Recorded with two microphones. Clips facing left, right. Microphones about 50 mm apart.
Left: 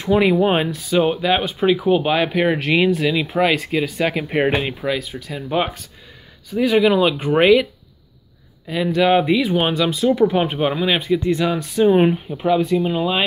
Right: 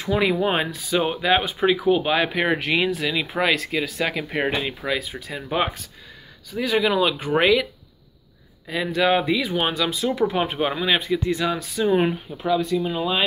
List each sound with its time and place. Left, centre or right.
0.1 s speech: centre
0.7 s speech: centre
4.9 s speech: centre
8.6 s speech: centre
11.8 s speech: left
12.3 s speech: centre
12.7 s speech: left